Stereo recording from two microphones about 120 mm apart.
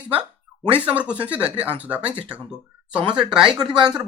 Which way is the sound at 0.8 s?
10° right (ahead or behind).